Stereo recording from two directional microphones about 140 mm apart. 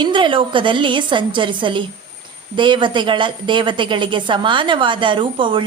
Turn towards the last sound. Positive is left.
turn(degrees=-35)  # may be behind; listen again after turning